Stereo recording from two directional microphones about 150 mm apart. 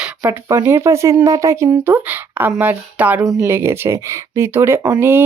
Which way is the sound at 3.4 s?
15° right (ahead or behind).